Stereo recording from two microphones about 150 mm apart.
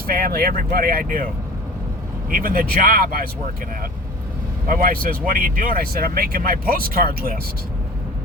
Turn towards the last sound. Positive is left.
turn(degrees=-75)  # may be behind; listen again after turning